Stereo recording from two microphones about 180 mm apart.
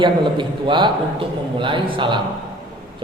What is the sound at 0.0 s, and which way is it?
A man's voice, 25° right (ahead or behind).